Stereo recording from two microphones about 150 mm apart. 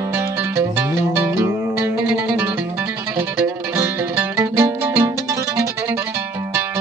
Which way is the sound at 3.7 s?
15° right (ahead or behind).